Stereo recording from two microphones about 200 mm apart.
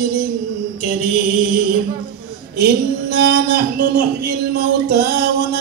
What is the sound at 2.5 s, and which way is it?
A man's voice, 50° right (ahead or behind).